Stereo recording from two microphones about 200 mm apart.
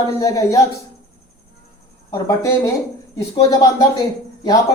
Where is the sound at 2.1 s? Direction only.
15° left (ahead or behind).